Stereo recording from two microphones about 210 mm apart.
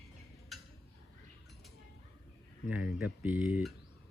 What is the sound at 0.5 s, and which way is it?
Tick-tock, centre (ahead or behind).